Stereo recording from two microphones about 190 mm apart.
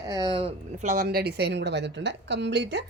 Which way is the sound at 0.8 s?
45° right (ahead or behind).